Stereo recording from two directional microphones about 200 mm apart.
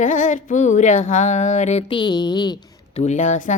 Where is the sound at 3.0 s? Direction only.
35° left (ahead or behind).